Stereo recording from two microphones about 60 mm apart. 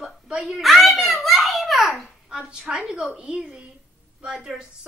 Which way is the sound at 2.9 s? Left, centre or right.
Centre.